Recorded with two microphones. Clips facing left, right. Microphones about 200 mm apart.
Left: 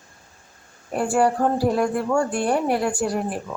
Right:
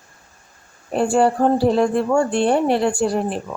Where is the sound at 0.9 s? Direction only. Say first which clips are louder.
Right 3 dB; 25° right (ahead or behind).